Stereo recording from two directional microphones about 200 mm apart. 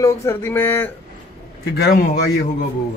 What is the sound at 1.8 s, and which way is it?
Speech, 50° left (ahead or behind).